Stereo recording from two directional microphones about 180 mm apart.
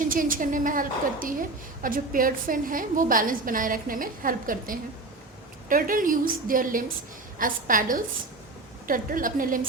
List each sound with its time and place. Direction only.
0.0 s a woman's voice: 50° right (ahead or behind)